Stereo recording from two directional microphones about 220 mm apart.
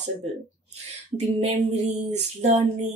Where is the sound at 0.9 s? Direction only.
30° right (ahead or behind).